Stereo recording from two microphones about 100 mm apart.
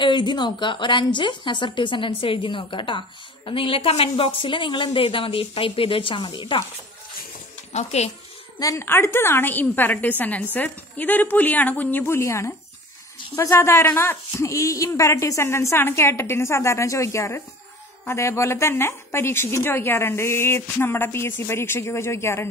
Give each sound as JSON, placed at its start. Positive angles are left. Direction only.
{"t": 0.0, "sound": "a woman's voice", "side_deg": 50}
{"t": 4.4, "sound": "a woman's voice", "side_deg": 55}
{"t": 7.9, "sound": "speech", "side_deg": 90}
{"t": 8.5, "sound": "speech", "side_deg": 35}
{"t": 8.8, "sound": "a woman's voice", "side_deg": 25}